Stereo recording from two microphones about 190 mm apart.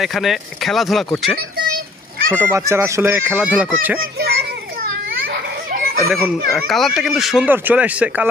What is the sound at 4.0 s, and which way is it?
Children playing, 55° right (ahead or behind).